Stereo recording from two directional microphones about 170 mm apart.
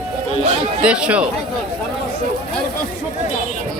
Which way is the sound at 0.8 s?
5° right (ahead or behind).